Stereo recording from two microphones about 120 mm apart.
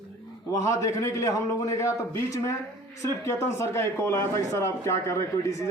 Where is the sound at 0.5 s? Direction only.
25° left (ahead or behind).